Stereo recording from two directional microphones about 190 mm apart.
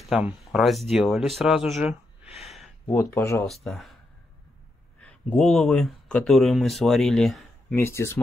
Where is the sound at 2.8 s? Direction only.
10° left (ahead or behind).